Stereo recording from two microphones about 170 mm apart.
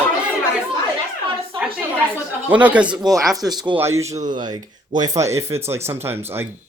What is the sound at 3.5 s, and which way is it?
Speech, 25° right (ahead or behind).